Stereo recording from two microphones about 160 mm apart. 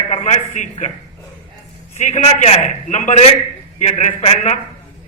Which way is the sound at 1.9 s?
45° left (ahead or behind).